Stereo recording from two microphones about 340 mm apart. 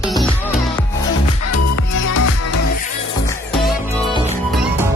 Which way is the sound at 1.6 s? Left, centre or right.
Left.